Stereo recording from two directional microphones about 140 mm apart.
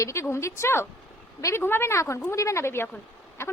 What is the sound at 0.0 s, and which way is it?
A woman's voice, 20° left (ahead or behind).